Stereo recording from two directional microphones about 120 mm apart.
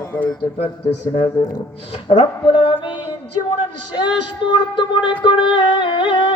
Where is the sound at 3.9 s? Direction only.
40° left (ahead or behind).